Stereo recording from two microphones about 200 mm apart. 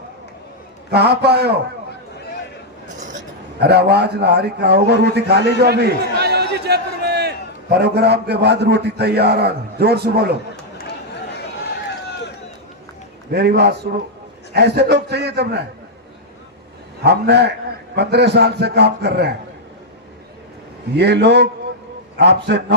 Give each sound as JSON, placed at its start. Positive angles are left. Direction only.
{"t": 0.9, "sound": "a man's voice", "side_deg": -55}
{"t": 3.6, "sound": "a man's voice", "side_deg": -55}
{"t": 13.3, "sound": "a man's voice", "side_deg": -55}
{"t": 17.0, "sound": "a man's voice", "side_deg": -55}
{"t": 20.9, "sound": "a man's voice", "side_deg": -55}